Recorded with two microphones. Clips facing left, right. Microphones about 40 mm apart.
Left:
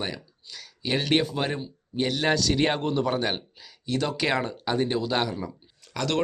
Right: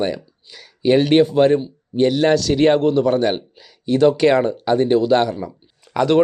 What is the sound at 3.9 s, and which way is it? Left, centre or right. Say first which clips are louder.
Speech: right 12 dB; centre.